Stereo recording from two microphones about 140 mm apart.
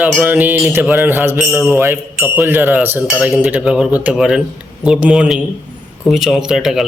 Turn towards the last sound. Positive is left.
turn(degrees=-5)  # may be behind; listen again after turning